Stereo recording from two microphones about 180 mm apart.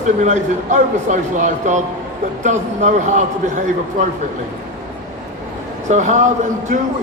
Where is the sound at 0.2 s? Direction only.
40° right (ahead or behind).